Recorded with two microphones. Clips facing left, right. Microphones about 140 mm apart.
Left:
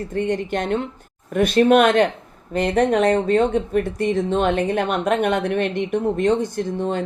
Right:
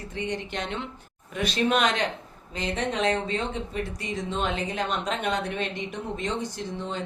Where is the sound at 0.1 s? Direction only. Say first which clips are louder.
Left 9 dB; 50° left (ahead or behind).